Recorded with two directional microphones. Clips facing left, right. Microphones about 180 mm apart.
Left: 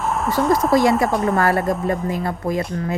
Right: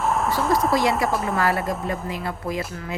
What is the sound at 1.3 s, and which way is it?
Speech, 40° left (ahead or behind).